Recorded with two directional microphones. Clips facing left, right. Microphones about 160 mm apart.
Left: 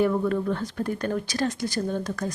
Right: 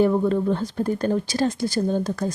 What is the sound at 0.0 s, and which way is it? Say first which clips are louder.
Speech: right 4 dB; 30° right (ahead or behind).